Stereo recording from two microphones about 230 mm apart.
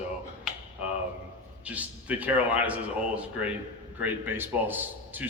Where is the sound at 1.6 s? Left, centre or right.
Centre.